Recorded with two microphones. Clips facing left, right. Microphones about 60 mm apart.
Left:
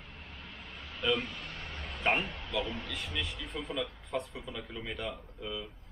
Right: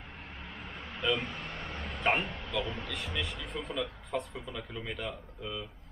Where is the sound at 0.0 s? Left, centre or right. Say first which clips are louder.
Right 3 dB; right.